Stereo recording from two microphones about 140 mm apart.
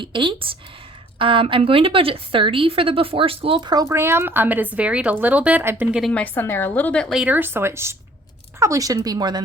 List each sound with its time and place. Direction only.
0.0 s speech: 35° right (ahead or behind); by 6.1 s 5° right (ahead or behind)
6.1 s a woman's voice: 10° left (ahead or behind)
7.1 s speech: 10° right (ahead or behind); by 9.4 s 30° right (ahead or behind)